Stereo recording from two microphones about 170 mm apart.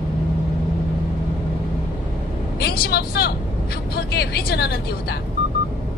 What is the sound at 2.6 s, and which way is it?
Vehicle, 65° left (ahead or behind).